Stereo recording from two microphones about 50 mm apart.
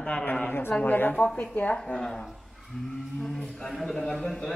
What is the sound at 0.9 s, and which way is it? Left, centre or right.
Speech, left.